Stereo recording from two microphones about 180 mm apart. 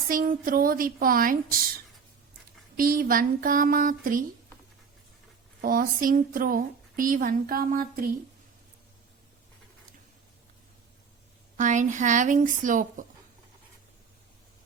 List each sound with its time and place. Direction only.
0.1 s speech: 50° right (ahead or behind)
2.7 s speech: 50° right (ahead or behind)
5.6 s speech: 50° right (ahead or behind)
11.5 s speech: 45° right (ahead or behind)